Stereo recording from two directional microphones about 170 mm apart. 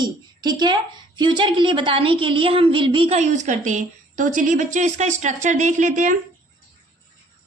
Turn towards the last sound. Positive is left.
turn(degrees=-45)  # may be behind; listen again after turning